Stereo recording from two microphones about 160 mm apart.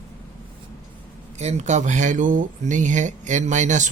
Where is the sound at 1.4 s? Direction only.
45° right (ahead or behind).